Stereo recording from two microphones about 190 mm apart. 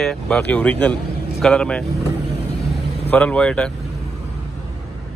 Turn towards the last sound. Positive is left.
turn(degrees=5)  # may be behind; listen again after turning